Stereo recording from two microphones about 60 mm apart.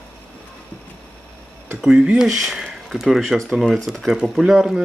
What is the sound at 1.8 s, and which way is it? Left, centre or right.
Speech, centre.